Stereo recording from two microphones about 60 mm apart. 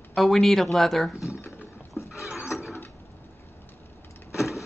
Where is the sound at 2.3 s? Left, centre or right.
Centre.